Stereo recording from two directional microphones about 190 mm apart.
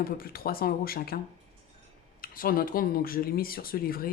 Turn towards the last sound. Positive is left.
turn(degrees=50)  # may be behind; listen again after turning